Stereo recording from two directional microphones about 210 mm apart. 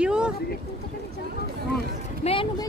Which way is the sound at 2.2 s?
25° left (ahead or behind).